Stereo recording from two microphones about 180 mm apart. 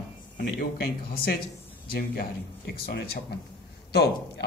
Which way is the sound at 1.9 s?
60° left (ahead or behind).